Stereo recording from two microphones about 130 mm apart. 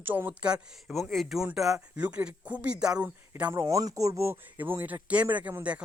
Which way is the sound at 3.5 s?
25° right (ahead or behind).